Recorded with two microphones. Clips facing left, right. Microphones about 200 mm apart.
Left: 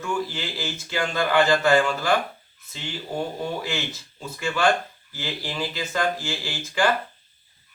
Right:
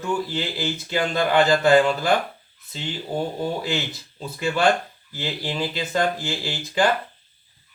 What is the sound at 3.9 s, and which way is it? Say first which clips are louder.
Speech: right 2 dB; 35° right (ahead or behind).